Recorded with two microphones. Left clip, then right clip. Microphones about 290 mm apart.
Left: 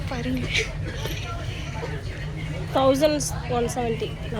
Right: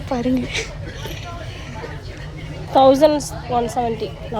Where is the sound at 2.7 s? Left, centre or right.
Right.